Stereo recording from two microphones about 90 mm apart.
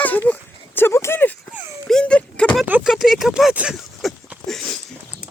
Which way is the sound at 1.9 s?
10° left (ahead or behind).